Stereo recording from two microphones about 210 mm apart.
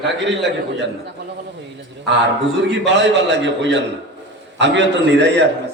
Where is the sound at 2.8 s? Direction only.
55° right (ahead or behind).